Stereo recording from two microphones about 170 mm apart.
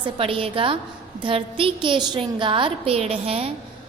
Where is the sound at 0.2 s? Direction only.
30° right (ahead or behind).